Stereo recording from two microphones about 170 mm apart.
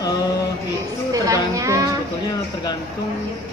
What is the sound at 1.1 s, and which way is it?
Speech, 20° right (ahead or behind).